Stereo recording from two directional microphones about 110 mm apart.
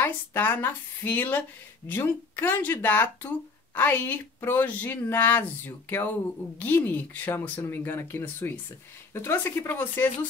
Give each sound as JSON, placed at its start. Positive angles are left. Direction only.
{"t": 0.0, "sound": "speech", "side_deg": 15}